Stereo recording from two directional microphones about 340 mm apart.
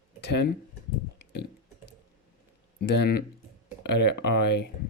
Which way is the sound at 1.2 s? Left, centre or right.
Left.